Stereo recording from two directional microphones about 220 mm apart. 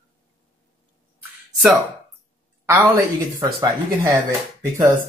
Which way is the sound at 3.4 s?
20° right (ahead or behind).